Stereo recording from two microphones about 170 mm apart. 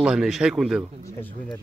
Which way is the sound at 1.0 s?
15° left (ahead or behind).